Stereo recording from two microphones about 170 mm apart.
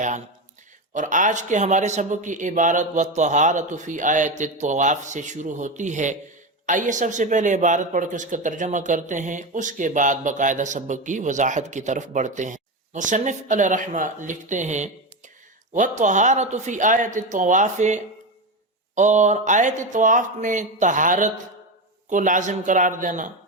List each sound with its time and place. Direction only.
0.9 s speech: 50° right (ahead or behind)